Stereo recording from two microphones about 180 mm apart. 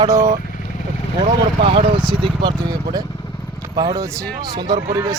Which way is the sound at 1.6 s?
30° right (ahead or behind).